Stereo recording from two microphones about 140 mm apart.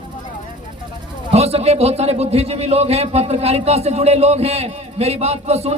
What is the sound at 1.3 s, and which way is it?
A man's voice, 45° right (ahead or behind).